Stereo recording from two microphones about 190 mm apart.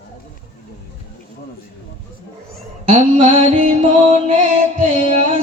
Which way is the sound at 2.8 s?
30° right (ahead or behind).